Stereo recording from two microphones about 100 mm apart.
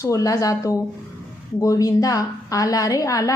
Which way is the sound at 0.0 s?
30° left (ahead or behind).